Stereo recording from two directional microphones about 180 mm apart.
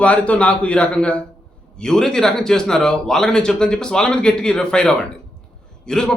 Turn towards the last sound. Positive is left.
turn(degrees=5)  # may be behind; listen again after turning